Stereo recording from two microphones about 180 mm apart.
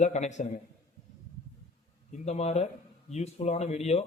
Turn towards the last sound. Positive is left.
turn(degrees=35)  # may be behind; listen again after turning